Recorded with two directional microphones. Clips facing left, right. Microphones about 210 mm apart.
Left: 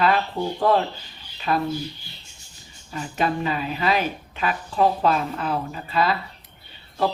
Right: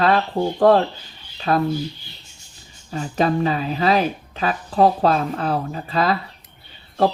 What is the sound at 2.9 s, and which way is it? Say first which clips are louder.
Speech: right 5 dB; 35° right (ahead or behind).